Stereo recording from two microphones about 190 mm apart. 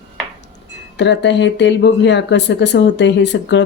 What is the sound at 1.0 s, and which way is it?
Speech, 65° left (ahead or behind).